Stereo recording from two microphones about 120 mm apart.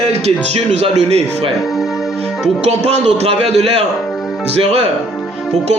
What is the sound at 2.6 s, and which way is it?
Speech, 65° right (ahead or behind).